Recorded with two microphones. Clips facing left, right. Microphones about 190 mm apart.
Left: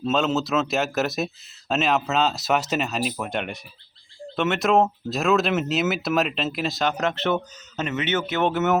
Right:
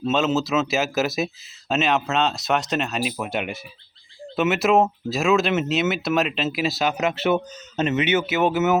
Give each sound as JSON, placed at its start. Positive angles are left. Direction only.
{"t": 0.0, "sound": "speech", "side_deg": 0}
{"t": 7.8, "sound": "speech", "side_deg": -25}
{"t": 8.0, "sound": "speech", "side_deg": -10}